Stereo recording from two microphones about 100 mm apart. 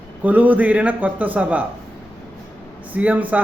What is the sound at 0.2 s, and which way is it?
A man's voice, 15° right (ahead or behind).